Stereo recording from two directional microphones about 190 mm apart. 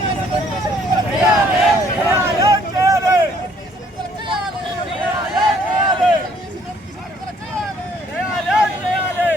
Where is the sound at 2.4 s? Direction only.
15° right (ahead or behind).